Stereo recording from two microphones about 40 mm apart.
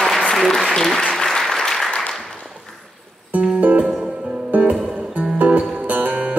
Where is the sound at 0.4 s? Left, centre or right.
Centre.